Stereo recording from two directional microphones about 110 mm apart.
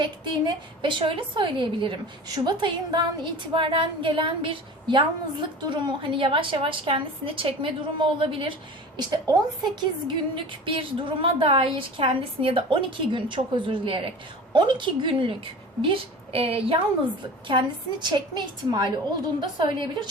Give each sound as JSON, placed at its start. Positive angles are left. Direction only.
{"t": 0.0, "sound": "a woman's voice", "side_deg": -45}
{"t": 9.0, "sound": "a woman's voice", "side_deg": -40}
{"t": 17.5, "sound": "a woman's voice", "side_deg": -45}